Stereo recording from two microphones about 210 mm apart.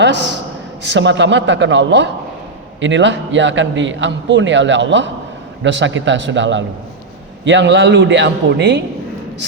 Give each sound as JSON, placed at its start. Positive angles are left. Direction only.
{"t": 0.0, "sound": "a man's voice", "side_deg": -55}